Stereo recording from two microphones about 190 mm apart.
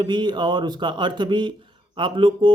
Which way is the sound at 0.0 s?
25° right (ahead or behind).